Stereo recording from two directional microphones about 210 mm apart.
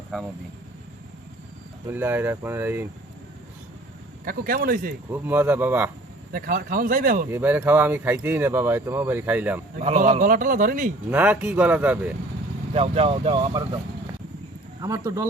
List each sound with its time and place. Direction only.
1.9 s speech: 10° right (ahead or behind)
4.3 s speech: 45° right (ahead or behind)
5.1 s speech: 10° right (ahead or behind)
6.3 s speech: 45° right (ahead or behind)
7.3 s speech: 10° right (ahead or behind)
9.7 s a man's voice: 35° right (ahead or behind)
11.1 s speech: 5° right (ahead or behind)
12.7 s speech: 30° right (ahead or behind)
14.8 s speech: 15° right (ahead or behind)